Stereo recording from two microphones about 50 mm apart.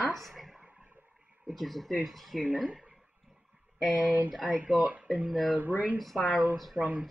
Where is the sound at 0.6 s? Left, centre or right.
Right.